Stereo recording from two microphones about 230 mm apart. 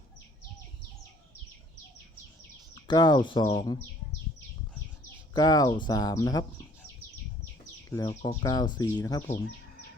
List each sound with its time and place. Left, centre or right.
2.8 s speech: centre
5.3 s speech: centre
7.9 s speech: centre